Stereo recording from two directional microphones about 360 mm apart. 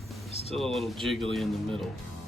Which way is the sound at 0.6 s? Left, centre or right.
Centre.